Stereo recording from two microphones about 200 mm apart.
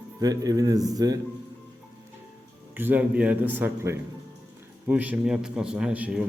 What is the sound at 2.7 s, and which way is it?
A man's voice, 10° right (ahead or behind).